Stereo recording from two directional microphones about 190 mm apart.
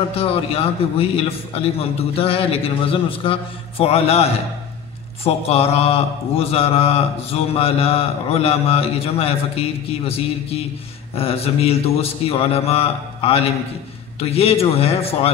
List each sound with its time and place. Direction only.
0.1 s speech: 30° left (ahead or behind)